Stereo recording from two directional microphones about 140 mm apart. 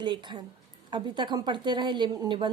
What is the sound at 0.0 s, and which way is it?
A woman's voice, 35° right (ahead or behind).